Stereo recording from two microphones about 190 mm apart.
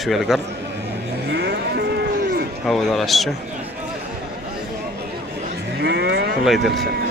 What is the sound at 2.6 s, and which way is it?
Speech, centre (ahead or behind).